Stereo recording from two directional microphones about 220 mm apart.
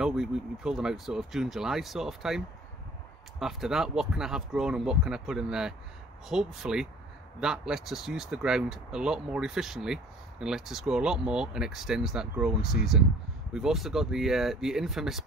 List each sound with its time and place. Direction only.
0.0 s speech: centre (ahead or behind)